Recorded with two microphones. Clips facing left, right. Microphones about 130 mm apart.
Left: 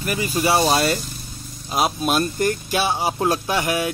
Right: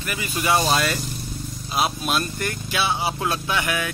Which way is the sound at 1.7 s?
40° left (ahead or behind).